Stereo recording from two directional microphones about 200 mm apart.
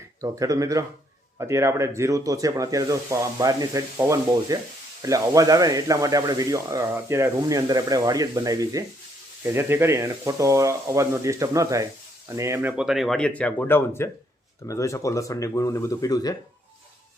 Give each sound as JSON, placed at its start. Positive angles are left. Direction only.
{"t": 0.2, "sound": "speech", "side_deg": -15}